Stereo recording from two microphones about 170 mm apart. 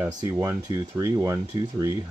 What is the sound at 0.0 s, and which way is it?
Speech, 20° right (ahead or behind).